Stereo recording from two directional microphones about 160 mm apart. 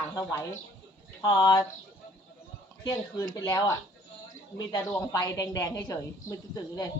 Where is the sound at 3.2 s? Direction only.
25° left (ahead or behind).